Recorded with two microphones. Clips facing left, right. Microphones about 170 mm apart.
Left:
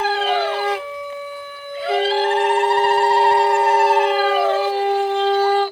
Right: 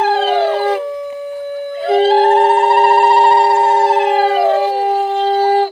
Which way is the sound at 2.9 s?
30° right (ahead or behind).